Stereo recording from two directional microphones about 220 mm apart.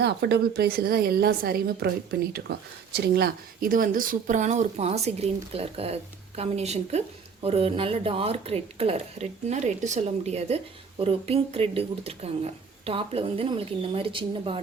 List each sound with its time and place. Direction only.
0.0 s a woman's voice: 50° right (ahead or behind); by 14.6 s 25° right (ahead or behind)